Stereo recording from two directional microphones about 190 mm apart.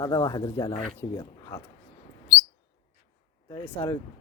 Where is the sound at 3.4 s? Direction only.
20° left (ahead or behind).